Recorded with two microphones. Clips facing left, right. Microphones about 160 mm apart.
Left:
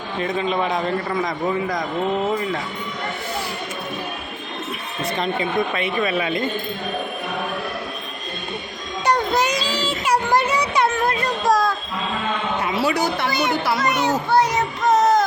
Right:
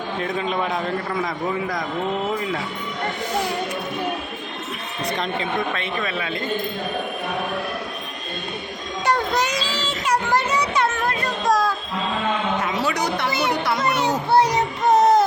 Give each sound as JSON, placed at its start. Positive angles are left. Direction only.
{"t": 0.2, "sound": "a man's voice", "side_deg": 0}
{"t": 5.2, "sound": "speech", "side_deg": 10}
{"t": 9.0, "sound": "a sound", "side_deg": 0}
{"t": 9.4, "sound": "child singing", "side_deg": 15}
{"t": 12.6, "sound": "a sound", "side_deg": 10}
{"t": 13.8, "sound": "children playing", "side_deg": -30}
{"t": 14.3, "sound": "child singing", "side_deg": -30}